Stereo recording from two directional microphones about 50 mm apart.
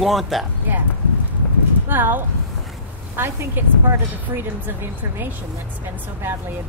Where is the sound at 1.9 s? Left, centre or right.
Right.